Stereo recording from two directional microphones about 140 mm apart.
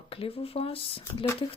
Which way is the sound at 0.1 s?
40° left (ahead or behind).